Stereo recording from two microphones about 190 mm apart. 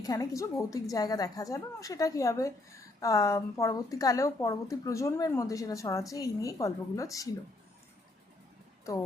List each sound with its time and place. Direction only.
0.0 s speech: 20° left (ahead or behind)